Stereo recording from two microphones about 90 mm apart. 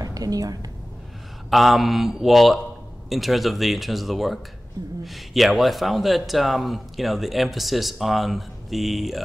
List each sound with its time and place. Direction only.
0.0 s speech: 45° right (ahead or behind)
1.5 s a man's voice: centre (ahead or behind)